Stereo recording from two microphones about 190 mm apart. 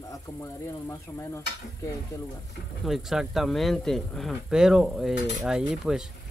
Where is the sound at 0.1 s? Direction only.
15° left (ahead or behind).